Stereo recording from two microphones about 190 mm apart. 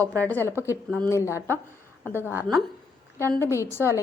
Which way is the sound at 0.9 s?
10° left (ahead or behind).